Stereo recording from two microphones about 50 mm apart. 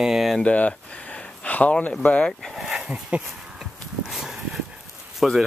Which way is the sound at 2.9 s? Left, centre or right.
Right.